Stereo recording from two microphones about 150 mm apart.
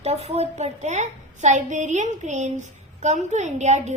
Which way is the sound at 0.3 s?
45° right (ahead or behind).